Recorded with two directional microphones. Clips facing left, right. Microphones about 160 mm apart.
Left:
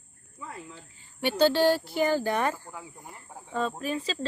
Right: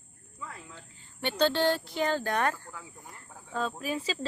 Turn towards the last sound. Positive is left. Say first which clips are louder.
# left 2 dB
turn(degrees=-5)  # may be behind; listen again after turning